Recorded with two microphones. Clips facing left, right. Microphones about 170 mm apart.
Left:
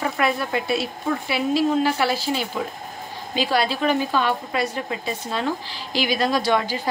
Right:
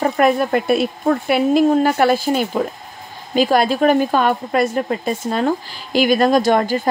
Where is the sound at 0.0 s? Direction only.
50° right (ahead or behind).